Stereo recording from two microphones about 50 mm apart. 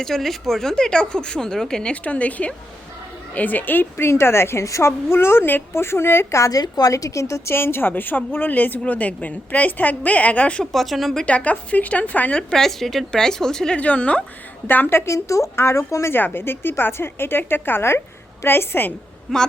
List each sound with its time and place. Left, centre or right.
0.0 s speech: centre
1.9 s a woman's voice: left
5.1 s a woman's voice: left
6.9 s a woman's voice: left
7.5 s a woman's voice: left
10.6 s speech: centre
11.3 s a woman's voice: left
12.4 s speech: centre
13.7 s a woman's voice: left
14.7 s a woman's voice: left
14.9 s a woman's voice: left
15.5 s speech: left
16.1 s a woman's voice: left
19.3 s speech: centre